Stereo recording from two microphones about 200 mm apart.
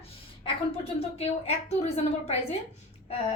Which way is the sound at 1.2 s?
30° left (ahead or behind).